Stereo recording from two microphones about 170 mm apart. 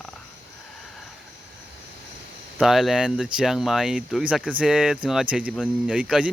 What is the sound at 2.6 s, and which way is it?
Speech, centre (ahead or behind).